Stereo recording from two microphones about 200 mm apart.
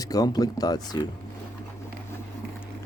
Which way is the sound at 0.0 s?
20° left (ahead or behind).